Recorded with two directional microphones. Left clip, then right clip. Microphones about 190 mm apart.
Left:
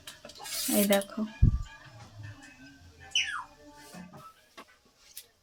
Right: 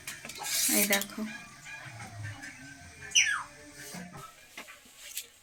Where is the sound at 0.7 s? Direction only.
45° left (ahead or behind).